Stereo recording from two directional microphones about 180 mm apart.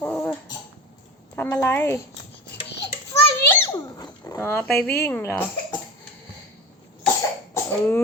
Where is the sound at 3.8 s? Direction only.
25° left (ahead or behind).